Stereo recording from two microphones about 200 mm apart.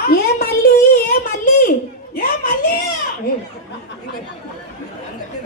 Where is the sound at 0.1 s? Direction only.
50° left (ahead or behind).